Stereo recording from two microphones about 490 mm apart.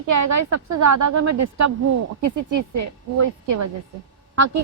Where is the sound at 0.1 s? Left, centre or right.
Right.